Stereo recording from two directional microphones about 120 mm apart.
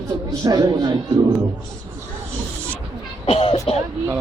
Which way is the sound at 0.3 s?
30° right (ahead or behind).